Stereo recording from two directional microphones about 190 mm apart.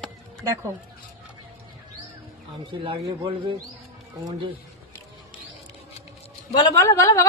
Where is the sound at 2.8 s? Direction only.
25° right (ahead or behind).